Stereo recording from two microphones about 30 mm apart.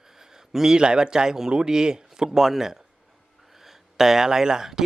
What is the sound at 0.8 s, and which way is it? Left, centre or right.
Speech, right.